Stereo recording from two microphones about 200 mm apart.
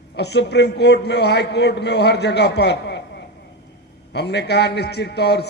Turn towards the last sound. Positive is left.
turn(degrees=55)  # may be behind; listen again after turning